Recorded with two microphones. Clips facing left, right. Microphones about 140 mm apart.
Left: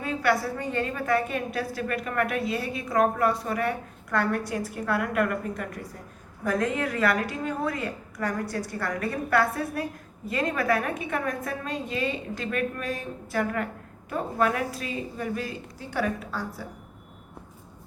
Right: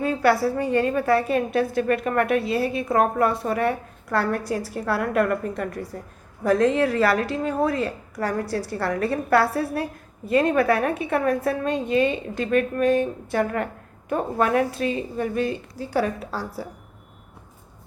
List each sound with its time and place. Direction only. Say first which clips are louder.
0.2 s a woman's voice: right 4 dB; 30° right (ahead or behind)